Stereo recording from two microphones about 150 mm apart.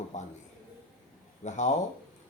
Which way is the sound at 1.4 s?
50° left (ahead or behind).